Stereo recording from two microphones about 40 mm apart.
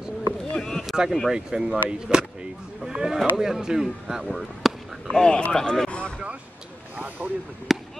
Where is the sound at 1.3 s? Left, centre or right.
Centre.